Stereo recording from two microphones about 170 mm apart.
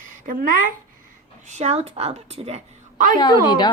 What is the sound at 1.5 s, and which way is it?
A woman's voice, 40° right (ahead or behind).